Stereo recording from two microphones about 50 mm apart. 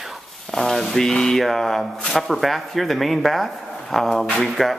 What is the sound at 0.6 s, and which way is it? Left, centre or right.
Speech, centre.